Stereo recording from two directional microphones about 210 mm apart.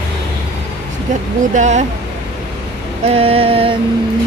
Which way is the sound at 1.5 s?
35° right (ahead or behind).